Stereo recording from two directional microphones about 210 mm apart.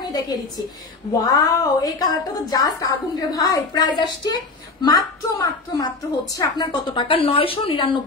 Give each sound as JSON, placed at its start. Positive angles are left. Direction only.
{"t": 1.2, "sound": "a woman's voice", "side_deg": 15}